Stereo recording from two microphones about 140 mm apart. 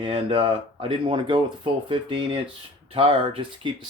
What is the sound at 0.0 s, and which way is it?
Speech, 40° right (ahead or behind).